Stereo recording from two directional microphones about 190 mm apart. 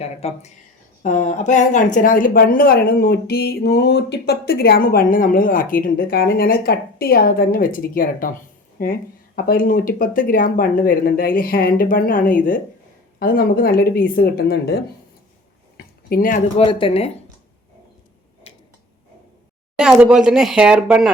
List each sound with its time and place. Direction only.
0.0 s a woman's voice: 35° left (ahead or behind); by 14.8 s 55° left (ahead or behind)
15.8 s tick-tock: 50° left (ahead or behind)
16.6 s speech: 25° left (ahead or behind)
19.7 s speech: 5° right (ahead or behind)